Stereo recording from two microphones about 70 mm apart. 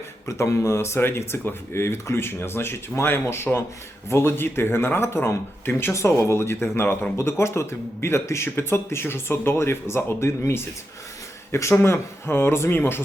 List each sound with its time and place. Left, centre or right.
0.3 s speech: left